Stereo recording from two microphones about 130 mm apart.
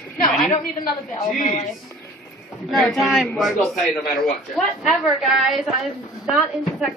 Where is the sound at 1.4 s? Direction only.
65° left (ahead or behind).